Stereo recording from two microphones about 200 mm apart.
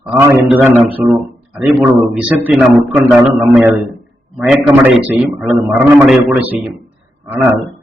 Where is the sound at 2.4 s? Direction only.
5° right (ahead or behind).